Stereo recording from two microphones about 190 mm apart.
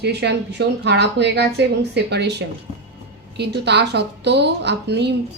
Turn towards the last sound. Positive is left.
turn(degrees=-60)  # may be behind; listen again after turning